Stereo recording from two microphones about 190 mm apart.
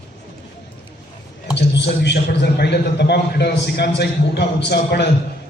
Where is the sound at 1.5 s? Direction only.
65° left (ahead or behind).